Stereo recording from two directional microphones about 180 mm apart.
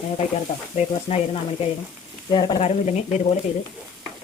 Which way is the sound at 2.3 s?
25° left (ahead or behind).